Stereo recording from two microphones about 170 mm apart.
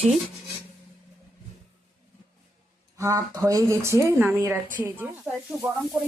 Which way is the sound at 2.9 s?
20° right (ahead or behind).